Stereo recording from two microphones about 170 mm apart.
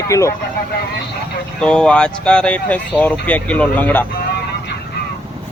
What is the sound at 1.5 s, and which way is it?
Speech, 5° left (ahead or behind).